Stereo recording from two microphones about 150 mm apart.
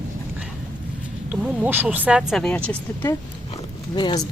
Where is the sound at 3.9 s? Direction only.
30° left (ahead or behind).